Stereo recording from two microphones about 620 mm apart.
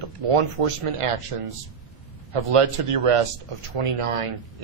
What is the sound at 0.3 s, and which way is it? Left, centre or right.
Speech, right.